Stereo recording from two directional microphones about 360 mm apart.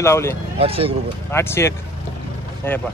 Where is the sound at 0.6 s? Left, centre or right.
Centre.